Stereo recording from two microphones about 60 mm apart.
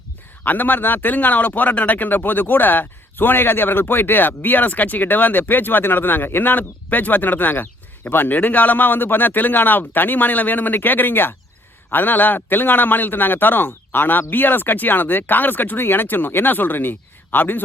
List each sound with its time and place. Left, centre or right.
0.4 s speech: left